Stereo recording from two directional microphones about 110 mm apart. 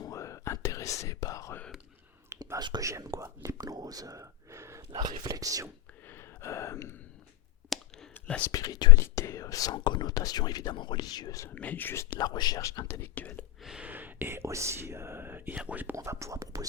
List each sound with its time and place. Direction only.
0.0 s whispering: 30° left (ahead or behind)
2.6 s speech: 40° right (ahead or behind)
4.9 s speech: 35° right (ahead or behind)
6.1 s gasp: 20° left (ahead or behind)
7.7 s whispering: centre (ahead or behind)
8.4 s speech: 35° left (ahead or behind)
9.7 s speech: 45° left (ahead or behind)
11.4 s speech: 15° left (ahead or behind)
12.1 s speech: 40° left (ahead or behind)
13.0 s speech: 15° left (ahead or behind)
13.6 s a sound: 5° right (ahead or behind)
13.8 s speech: 15° right (ahead or behind)
16.0 s speech: 30° right (ahead or behind)